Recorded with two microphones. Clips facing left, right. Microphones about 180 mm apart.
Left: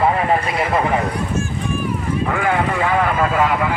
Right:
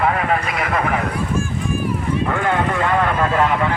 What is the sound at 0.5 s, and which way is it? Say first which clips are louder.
Speech: left 2 dB; 30° left (ahead or behind).